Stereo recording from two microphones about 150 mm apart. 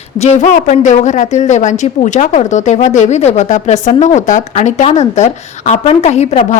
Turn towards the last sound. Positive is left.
turn(degrees=50)  # may be behind; listen again after turning